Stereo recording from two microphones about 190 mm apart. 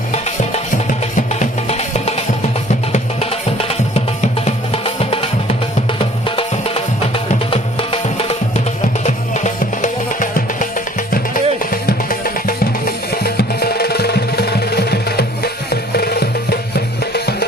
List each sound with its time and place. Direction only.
0.1 s music: 40° left (ahead or behind); by 17.3 s 60° left (ahead or behind)